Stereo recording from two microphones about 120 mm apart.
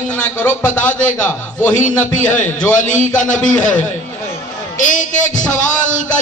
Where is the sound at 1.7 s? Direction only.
90° left.